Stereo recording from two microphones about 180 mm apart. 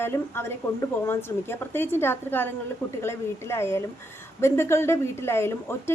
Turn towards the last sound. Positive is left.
turn(degrees=15)  # may be behind; listen again after turning